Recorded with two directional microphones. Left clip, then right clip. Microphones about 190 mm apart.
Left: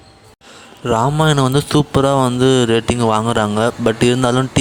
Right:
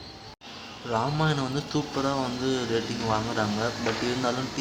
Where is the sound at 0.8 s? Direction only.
50° left (ahead or behind).